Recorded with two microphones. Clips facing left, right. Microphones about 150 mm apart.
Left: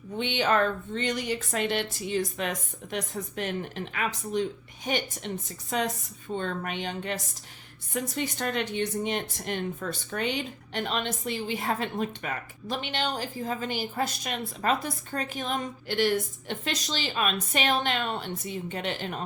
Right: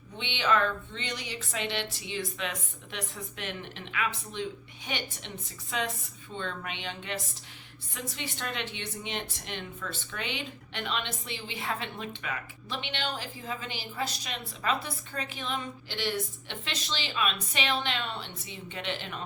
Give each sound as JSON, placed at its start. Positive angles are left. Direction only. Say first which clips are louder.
{"t": 0.2, "sound": "speech", "louder": "left 3 dB", "side_deg": 45}